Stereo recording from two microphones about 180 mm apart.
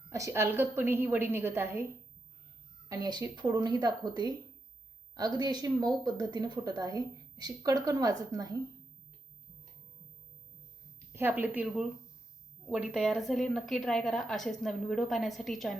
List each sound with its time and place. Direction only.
0.1 s a woman's voice: 15° right (ahead or behind)
2.9 s speech: 20° right (ahead or behind)
11.1 s a woman's voice: 10° right (ahead or behind)